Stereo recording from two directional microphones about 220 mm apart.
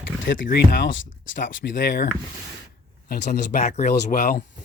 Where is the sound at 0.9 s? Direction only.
60° left (ahead or behind).